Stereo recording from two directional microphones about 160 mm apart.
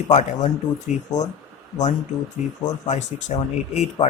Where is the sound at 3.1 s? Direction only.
45° left (ahead or behind).